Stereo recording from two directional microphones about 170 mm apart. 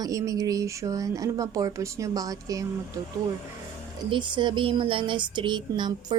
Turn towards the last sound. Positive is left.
turn(degrees=-25)  # may be behind; listen again after turning